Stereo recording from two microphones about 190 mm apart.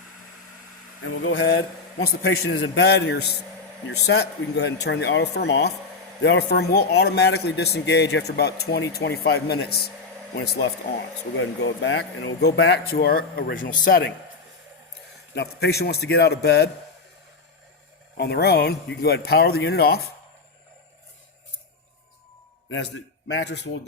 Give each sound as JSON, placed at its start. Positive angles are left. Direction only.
{"t": 1.0, "sound": "a man's voice", "side_deg": 80}
{"t": 11.3, "sound": "a man's voice", "side_deg": 70}
{"t": 15.4, "sound": "speech", "side_deg": 60}
{"t": 18.2, "sound": "speech", "side_deg": 60}
{"t": 23.3, "sound": "a man's voice", "side_deg": 65}